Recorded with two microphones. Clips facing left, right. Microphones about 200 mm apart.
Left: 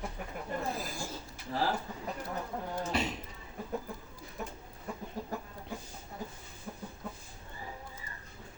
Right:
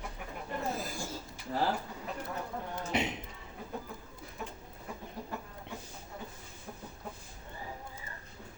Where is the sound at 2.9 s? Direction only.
20° right (ahead or behind).